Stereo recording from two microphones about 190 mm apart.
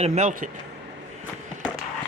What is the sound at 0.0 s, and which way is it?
Speech, 40° right (ahead or behind).